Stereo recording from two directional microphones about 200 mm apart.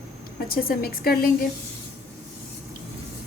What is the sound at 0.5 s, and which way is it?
Speech, 50° left (ahead or behind).